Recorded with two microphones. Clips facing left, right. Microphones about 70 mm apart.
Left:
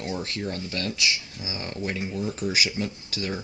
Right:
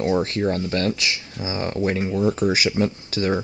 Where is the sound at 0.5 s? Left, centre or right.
Right.